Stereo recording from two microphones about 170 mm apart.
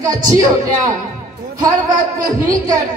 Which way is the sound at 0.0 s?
20° right (ahead or behind).